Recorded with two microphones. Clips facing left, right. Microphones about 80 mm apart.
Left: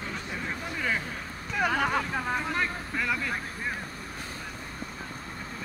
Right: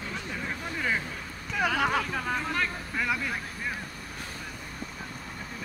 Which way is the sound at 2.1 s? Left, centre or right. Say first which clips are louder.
Left 1 dB; centre.